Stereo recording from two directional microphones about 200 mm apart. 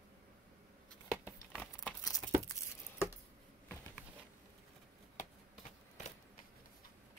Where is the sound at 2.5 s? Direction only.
10° left (ahead or behind).